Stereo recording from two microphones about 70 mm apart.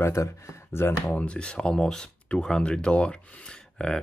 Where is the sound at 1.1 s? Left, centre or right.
Centre.